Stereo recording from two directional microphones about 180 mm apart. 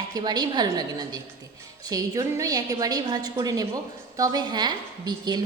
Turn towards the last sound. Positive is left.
turn(degrees=-20)  # may be behind; listen again after turning